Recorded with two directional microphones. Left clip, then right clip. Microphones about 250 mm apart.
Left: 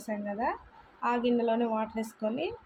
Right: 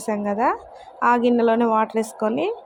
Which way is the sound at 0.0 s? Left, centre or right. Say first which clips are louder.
Right 11 dB; right.